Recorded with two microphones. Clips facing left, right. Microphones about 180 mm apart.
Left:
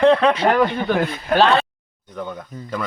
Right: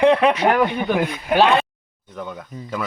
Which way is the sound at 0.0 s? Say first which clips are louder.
Left 1 dB; 15° right (ahead or behind).